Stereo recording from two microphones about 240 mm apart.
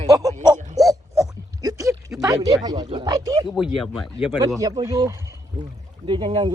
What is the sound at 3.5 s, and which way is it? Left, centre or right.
Speech, centre.